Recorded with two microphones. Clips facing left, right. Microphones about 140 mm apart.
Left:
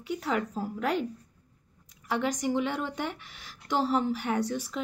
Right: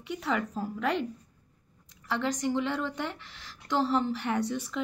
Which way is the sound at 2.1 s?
10° left (ahead or behind).